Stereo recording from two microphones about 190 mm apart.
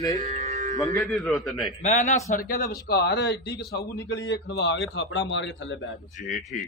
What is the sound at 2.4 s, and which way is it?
A man's voice, 50° left (ahead or behind).